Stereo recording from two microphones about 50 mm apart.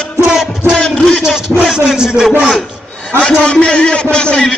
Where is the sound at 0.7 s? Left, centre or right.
Left.